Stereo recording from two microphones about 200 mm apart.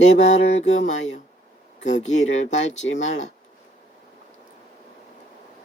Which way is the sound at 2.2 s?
75° left (ahead or behind).